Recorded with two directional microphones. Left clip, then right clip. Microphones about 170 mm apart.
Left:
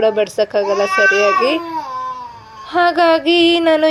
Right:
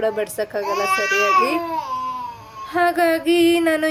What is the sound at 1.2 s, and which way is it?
Speech, 5° left (ahead or behind).